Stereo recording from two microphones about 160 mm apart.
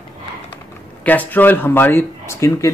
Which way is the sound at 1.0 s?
10° left (ahead or behind).